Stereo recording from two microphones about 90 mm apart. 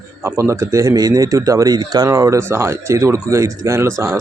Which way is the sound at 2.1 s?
30° right (ahead or behind).